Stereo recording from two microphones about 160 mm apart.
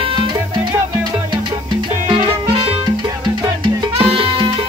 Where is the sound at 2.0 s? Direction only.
35° right (ahead or behind).